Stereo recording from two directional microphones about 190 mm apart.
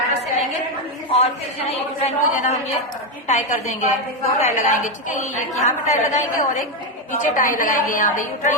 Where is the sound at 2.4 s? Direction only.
40° left (ahead or behind).